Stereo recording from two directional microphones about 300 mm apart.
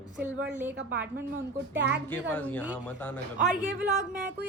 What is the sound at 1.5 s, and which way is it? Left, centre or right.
Speech, right.